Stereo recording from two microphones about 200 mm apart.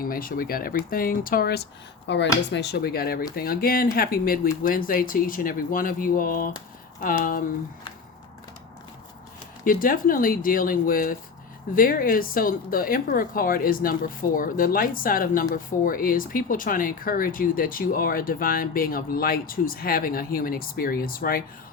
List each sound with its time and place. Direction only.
0.1 s speech: 45° left (ahead or behind)
2.0 s speech: 60° left (ahead or behind); by 7.4 s 45° left (ahead or behind)
9.6 s speech: 45° left (ahead or behind)